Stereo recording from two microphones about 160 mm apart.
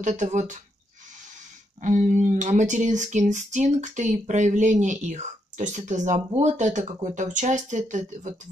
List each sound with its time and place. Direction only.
0.0 s speech: 45° right (ahead or behind)
1.8 s speech: 55° right (ahead or behind)